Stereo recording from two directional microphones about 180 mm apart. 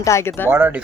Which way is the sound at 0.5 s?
10° right (ahead or behind).